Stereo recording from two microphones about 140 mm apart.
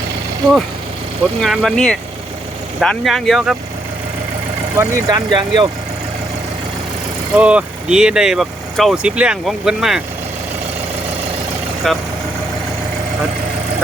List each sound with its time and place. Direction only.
1.4 s speech: 5° left (ahead or behind)
4.8 s speech: 25° right (ahead or behind)
7.3 s speech: 10° right (ahead or behind)
11.9 s speech: centre (ahead or behind)